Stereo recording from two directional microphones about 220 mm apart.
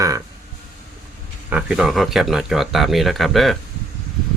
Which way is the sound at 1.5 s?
5° right (ahead or behind).